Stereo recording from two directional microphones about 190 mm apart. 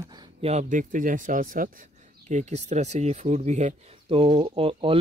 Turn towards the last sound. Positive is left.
turn(degrees=-30)  # may be behind; listen again after turning